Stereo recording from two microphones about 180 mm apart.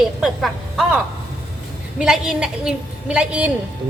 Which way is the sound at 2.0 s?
5° right (ahead or behind).